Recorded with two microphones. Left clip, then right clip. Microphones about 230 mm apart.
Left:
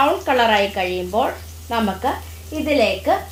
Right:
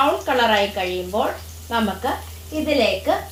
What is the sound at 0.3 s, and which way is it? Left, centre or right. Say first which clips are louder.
A woman's voice: left 2 dB; left.